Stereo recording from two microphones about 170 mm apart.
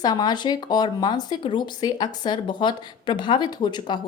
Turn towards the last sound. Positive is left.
turn(degrees=25)  # may be behind; listen again after turning